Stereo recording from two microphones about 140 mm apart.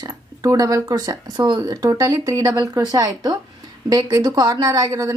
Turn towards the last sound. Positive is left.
turn(degrees=-25)  # may be behind; listen again after turning